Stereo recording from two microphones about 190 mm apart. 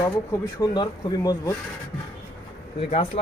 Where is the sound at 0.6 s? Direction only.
20° left (ahead or behind).